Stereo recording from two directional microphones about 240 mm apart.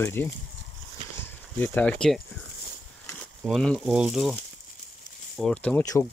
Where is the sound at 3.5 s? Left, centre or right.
Centre.